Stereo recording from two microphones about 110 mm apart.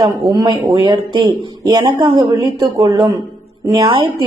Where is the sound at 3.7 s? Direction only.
40° right (ahead or behind).